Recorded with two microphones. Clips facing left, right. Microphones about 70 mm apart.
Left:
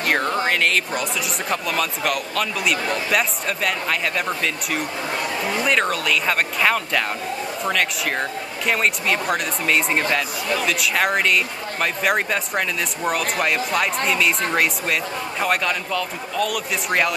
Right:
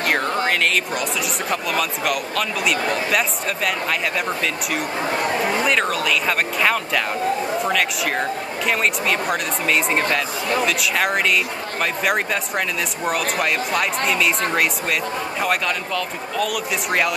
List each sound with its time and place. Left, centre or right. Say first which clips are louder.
0.0 s a sound: even; centre
1.5 s speech: even; centre
5.1 s speech: right 4 dB; right
5.7 s speech: even; centre